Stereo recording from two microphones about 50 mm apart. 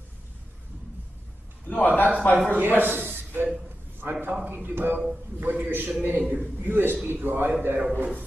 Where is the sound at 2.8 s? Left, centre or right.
Right.